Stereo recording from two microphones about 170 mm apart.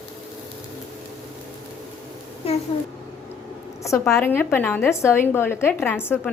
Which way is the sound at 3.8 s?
15° left (ahead or behind).